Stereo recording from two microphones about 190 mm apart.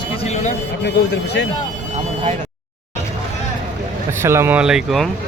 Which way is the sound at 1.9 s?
35° right (ahead or behind).